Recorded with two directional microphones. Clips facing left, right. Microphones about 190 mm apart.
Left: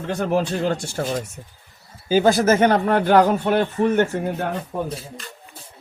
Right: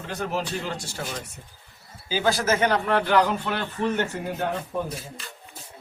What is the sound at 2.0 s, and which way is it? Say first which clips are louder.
Speech: left 7 dB; 50° left (ahead or behind).